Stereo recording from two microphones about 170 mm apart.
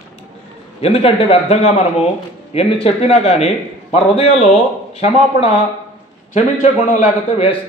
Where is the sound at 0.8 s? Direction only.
35° left (ahead or behind).